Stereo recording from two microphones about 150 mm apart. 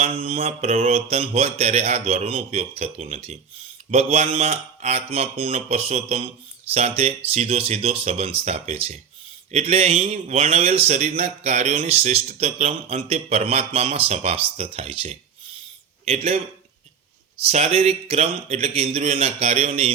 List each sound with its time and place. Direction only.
0.0 s a man's voice: 40° right (ahead or behind)
17.5 s a man's voice: 45° right (ahead or behind)